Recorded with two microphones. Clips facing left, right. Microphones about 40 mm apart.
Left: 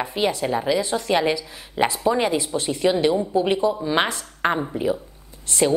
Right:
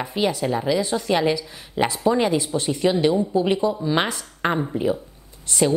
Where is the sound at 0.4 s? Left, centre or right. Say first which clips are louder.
Even; centre.